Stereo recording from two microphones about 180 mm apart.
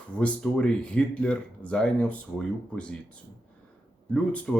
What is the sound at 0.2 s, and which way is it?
Speech, 5° left (ahead or behind).